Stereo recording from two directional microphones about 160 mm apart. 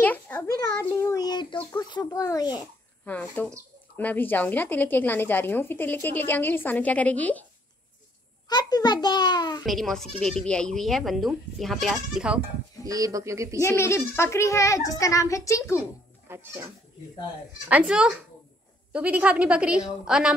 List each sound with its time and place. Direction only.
0.0 s a sound: 10° left (ahead or behind)
1.0 s a child's voice: 25° left (ahead or behind)
3.1 s speech: 10° left (ahead or behind)
8.5 s a child's voice: 25° left (ahead or behind)
9.7 s speech: centre (ahead or behind)
12.8 s speech: 20° right (ahead or behind)
13.6 s a child's voice: 20° left (ahead or behind)
16.3 s a woman's voice: 15° right (ahead or behind)